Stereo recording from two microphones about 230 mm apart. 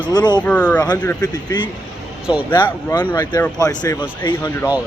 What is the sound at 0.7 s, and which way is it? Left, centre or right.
Speech, centre.